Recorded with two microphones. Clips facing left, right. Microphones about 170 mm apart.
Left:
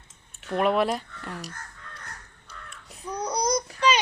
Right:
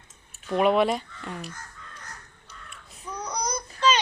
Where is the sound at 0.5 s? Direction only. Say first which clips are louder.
Right 2 dB; centre (ahead or behind).